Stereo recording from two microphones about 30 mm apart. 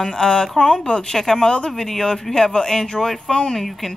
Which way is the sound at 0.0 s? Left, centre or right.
Centre.